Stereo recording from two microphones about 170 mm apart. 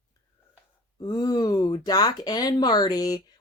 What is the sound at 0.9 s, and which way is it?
Speech, 25° left (ahead or behind).